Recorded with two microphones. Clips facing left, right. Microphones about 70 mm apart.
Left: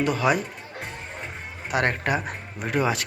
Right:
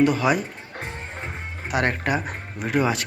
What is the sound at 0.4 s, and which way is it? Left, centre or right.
Music, right.